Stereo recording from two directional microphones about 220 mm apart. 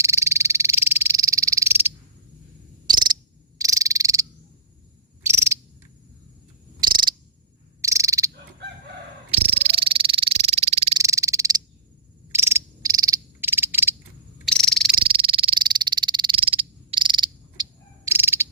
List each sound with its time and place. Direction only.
0.0 s frog: 10° right (ahead or behind)
2.8 s cricket: 20° right (ahead or behind)
3.6 s frog: 15° right (ahead or behind)
6.7 s frog: 20° right (ahead or behind)
9.3 s frog: 30° right (ahead or behind)
10.9 s frog: 15° right (ahead or behind)
14.4 s frog: 5° left (ahead or behind)
15.0 s frog: 25° right (ahead or behind)
17.6 s cricket: 10° right (ahead or behind)